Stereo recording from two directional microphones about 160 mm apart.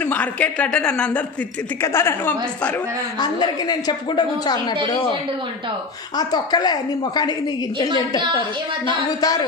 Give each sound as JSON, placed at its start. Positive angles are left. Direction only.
{"t": 0.0, "sound": "a woman's voice", "side_deg": 10}
{"t": 3.2, "sound": "a woman's voice", "side_deg": 25}
{"t": 6.1, "sound": "a woman's voice", "side_deg": 25}